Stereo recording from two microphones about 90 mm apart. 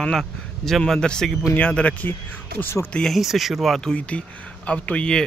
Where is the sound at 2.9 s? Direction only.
Centre (ahead or behind).